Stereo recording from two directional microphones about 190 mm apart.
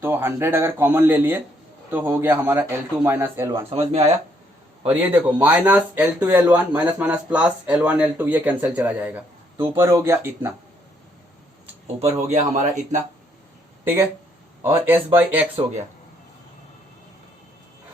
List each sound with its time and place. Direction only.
0.0 s speech: 10° right (ahead or behind)
3.8 s a man's voice: 35° right (ahead or behind)
4.9 s speech: 10° right (ahead or behind)
12.3 s a man's voice: 40° right (ahead or behind)
13.8 s speech: 10° right (ahead or behind)